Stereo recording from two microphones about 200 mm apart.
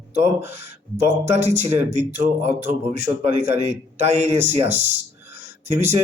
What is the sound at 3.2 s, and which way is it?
Speech, 35° right (ahead or behind).